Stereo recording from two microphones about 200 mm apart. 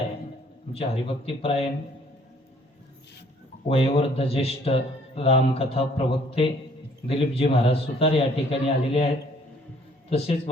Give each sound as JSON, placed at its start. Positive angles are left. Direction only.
{"t": 0.7, "sound": "a man's voice", "side_deg": 30}
{"t": 3.7, "sound": "a man's voice", "side_deg": 30}
{"t": 10.1, "sound": "a man's voice", "side_deg": 30}